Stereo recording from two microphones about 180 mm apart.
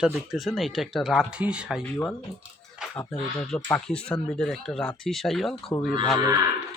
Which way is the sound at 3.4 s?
5° left (ahead or behind).